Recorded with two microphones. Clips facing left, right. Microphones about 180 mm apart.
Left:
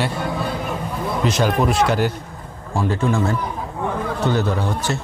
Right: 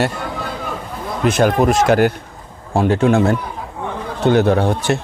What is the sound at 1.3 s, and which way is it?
Speech, 55° right (ahead or behind).